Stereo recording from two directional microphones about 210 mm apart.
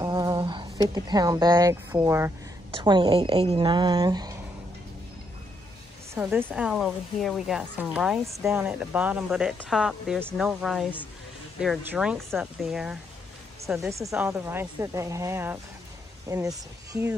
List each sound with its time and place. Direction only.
0.0 s speech: 15° right (ahead or behind)
2.8 s speech: 20° right (ahead or behind)
6.1 s speech: 5° right (ahead or behind)
13.7 s a woman's voice: 15° right (ahead or behind)